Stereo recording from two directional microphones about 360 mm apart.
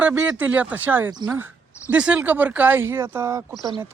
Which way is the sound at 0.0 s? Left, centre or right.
Centre.